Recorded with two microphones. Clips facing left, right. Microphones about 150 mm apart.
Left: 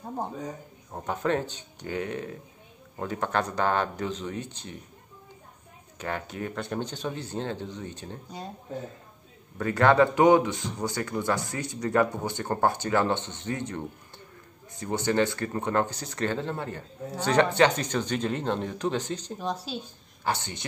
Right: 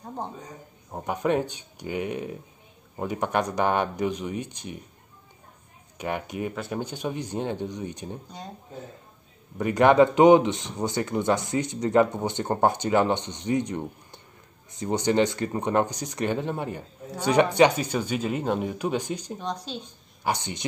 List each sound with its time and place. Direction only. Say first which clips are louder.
0.9 s speech: right 3 dB; 15° right (ahead or behind)
5.9 s speech: right 3 dB; 15° right (ahead or behind)
9.6 s a man's voice: right 3 dB; 15° right (ahead or behind)
19.3 s speech: even; 5° left (ahead or behind)
20.2 s speech: right 2 dB; 15° right (ahead or behind)